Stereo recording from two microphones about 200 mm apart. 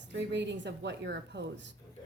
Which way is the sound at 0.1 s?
60° right (ahead or behind).